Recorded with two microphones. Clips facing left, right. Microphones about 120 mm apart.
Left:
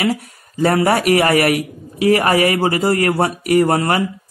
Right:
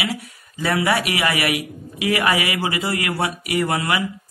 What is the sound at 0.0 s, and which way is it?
Speech, 45° left (ahead or behind).